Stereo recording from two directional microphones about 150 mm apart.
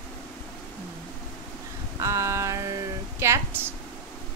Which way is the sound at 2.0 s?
20° right (ahead or behind).